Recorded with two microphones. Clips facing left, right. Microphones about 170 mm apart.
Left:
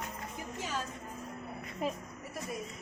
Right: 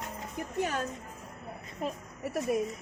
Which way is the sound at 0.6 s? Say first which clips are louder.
Right 6 dB; 60° right (ahead or behind).